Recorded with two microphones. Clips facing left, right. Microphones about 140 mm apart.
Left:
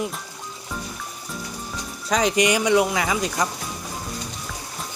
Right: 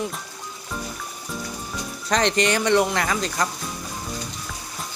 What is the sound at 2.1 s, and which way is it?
Speech, 5° left (ahead or behind).